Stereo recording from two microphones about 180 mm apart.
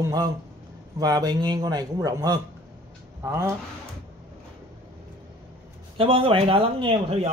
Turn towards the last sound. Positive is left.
turn(degrees=-30)  # may be behind; listen again after turning